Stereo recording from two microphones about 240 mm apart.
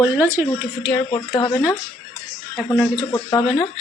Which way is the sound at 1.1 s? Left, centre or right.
Centre.